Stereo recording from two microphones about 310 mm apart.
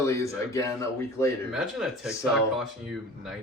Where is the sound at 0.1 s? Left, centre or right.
Centre.